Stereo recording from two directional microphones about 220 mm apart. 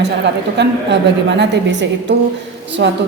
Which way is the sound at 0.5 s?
50° right (ahead or behind).